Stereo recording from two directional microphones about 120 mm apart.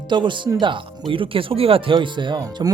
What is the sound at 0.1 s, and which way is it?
Speech, 40° right (ahead or behind).